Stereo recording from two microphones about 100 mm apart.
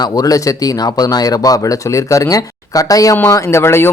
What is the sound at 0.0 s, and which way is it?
Speech, 40° left (ahead or behind).